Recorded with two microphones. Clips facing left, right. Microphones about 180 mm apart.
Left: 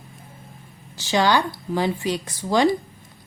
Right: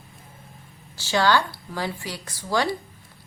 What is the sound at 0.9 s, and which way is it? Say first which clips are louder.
Speech: left 2 dB; 20° left (ahead or behind).